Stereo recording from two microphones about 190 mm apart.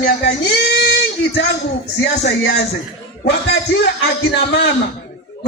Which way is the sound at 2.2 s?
60° left (ahead or behind).